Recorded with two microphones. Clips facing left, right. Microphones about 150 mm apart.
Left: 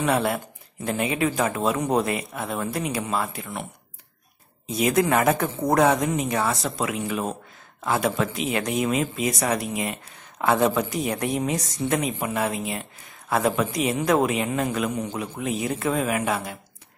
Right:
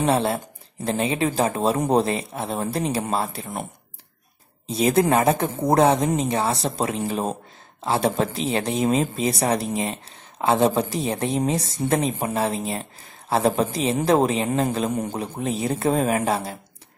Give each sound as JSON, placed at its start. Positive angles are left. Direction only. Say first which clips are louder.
{"t": 0.0, "sound": "speech", "louder": "right 2 dB", "side_deg": -30}
{"t": 4.6, "sound": "speech", "louder": "right 2 dB", "side_deg": -30}
{"t": 14.9, "sound": "a man's voice", "louder": "right 3 dB", "side_deg": -45}
{"t": 15.4, "sound": "speech", "louder": "right 3 dB", "side_deg": -30}